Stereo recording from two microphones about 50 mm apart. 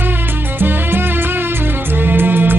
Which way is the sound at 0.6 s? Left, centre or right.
Right.